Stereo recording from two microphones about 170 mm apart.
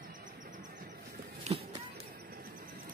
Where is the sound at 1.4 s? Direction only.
40° right (ahead or behind).